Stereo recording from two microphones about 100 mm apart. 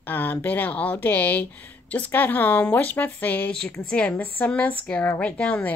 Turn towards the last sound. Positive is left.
turn(degrees=10)  # may be behind; listen again after turning